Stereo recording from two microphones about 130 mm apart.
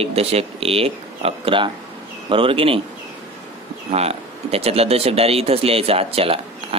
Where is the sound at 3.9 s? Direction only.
50° right (ahead or behind).